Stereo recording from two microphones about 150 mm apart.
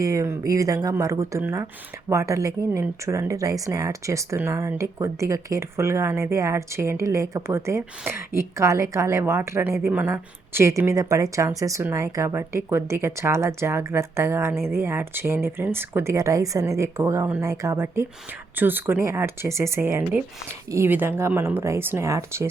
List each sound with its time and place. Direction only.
0.0 s speech: 20° right (ahead or behind)